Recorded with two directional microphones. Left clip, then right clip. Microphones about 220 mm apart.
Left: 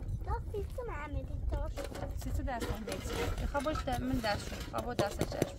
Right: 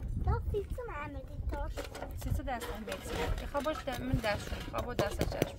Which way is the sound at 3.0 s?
40° left (ahead or behind).